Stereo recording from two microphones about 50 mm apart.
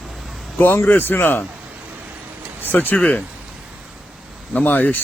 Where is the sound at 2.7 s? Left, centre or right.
Left.